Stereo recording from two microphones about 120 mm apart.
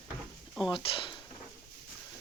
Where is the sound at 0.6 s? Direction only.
45° left (ahead or behind).